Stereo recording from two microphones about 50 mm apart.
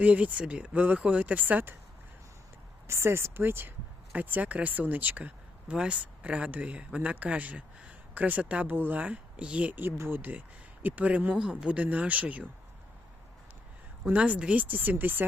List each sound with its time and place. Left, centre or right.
0.0 s speech: right
2.8 s speech: right
4.1 s speech: right
8.6 s speech: right
11.3 s speech: centre
11.8 s speech: right
14.2 s speech: right